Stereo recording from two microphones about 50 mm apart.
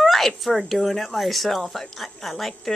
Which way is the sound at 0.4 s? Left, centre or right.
Centre.